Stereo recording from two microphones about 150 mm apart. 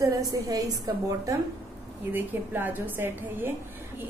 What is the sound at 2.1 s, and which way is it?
A woman's voice, 10° right (ahead or behind).